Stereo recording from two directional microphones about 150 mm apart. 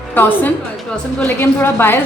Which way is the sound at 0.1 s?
10° left (ahead or behind).